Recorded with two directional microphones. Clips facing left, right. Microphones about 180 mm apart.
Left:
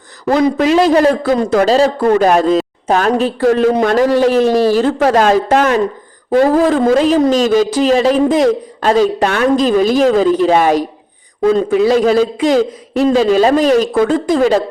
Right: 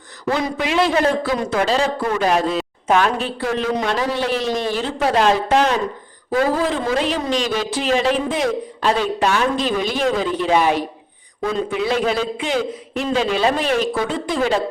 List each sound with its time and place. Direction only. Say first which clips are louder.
0.3 s a man's voice: left 9 dB; 40° left (ahead or behind)